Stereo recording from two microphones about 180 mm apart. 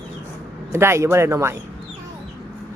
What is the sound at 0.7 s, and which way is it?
Speech, 15° right (ahead or behind).